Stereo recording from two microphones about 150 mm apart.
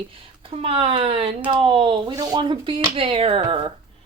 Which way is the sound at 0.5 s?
40° right (ahead or behind).